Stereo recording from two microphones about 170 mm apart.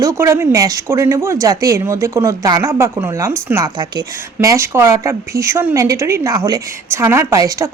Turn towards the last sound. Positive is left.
turn(degrees=-20)  # may be behind; listen again after turning